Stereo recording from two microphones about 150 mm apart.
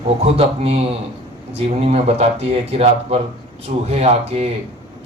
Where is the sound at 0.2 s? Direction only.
40° right (ahead or behind).